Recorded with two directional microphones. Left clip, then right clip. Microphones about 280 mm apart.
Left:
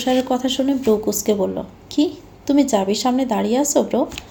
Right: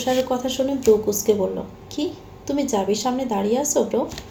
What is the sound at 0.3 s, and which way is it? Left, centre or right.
Speech, left.